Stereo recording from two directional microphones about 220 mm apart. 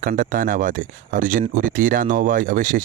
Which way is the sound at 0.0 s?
40° right (ahead or behind).